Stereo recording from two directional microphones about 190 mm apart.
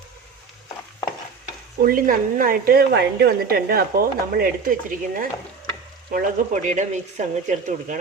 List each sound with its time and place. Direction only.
1.8 s a woman's voice: 50° right (ahead or behind)